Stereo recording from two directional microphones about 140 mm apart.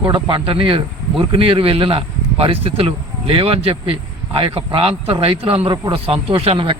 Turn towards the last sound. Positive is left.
turn(degrees=-40)  # may be behind; listen again after turning